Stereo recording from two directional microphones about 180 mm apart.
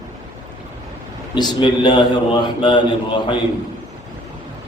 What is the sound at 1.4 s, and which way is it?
A man's voice, 25° left (ahead or behind).